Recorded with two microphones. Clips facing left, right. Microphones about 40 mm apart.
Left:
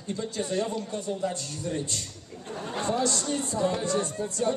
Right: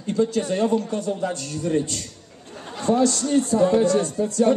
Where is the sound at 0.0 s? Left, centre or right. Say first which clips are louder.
Right 10 dB; right.